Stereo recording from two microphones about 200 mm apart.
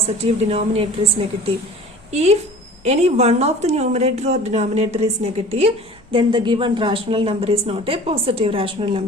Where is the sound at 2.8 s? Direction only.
35° right (ahead or behind).